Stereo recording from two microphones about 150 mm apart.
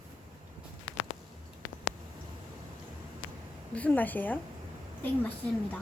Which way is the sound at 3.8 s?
10° left (ahead or behind).